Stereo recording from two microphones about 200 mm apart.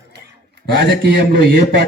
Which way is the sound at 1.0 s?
55° right (ahead or behind).